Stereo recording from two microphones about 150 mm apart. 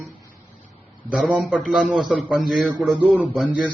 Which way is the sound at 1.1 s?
5° right (ahead or behind).